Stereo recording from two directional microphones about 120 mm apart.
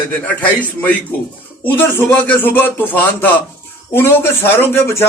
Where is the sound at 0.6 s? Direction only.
15° left (ahead or behind).